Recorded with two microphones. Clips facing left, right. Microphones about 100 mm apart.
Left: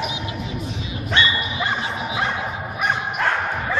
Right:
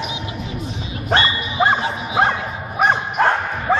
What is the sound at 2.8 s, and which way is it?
Bow-wow, 35° right (ahead or behind).